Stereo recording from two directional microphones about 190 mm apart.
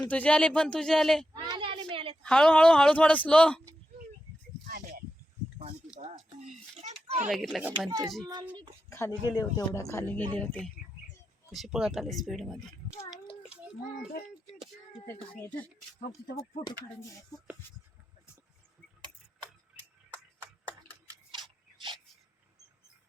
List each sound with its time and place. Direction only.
0.1 s a woman's voice: 5° left (ahead or behind)
1.3 s a sound: 25° right (ahead or behind)
2.2 s a woman's voice: 5° left (ahead or behind)
4.6 s a sound: 50° right (ahead or behind)
6.0 s a sound: 35° right (ahead or behind)
7.3 s a woman's voice: centre (ahead or behind)
7.9 s a child's voice: 15° right (ahead or behind)
8.9 s a woman's voice: 15° left (ahead or behind)
15.0 s speech: 15° left (ahead or behind)